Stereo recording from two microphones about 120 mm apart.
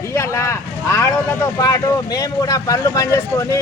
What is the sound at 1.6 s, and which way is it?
Speech, 30° left (ahead or behind).